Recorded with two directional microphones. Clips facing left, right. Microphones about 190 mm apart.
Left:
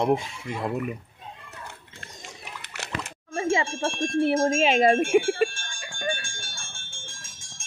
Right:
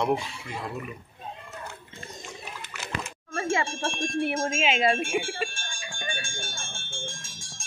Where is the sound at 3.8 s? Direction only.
30° left (ahead or behind); by 6.1 s 50° left (ahead or behind).